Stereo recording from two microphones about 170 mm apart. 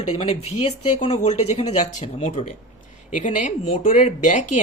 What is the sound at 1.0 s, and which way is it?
Speech, 40° left (ahead or behind).